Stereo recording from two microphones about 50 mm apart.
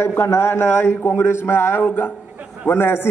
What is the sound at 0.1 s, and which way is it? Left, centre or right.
A man's voice, left.